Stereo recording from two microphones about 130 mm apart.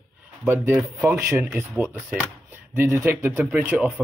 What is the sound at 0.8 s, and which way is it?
Speech, 10° right (ahead or behind).